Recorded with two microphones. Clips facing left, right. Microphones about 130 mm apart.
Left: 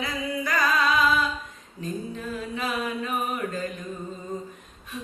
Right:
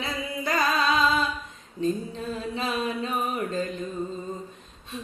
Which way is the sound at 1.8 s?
30° right (ahead or behind).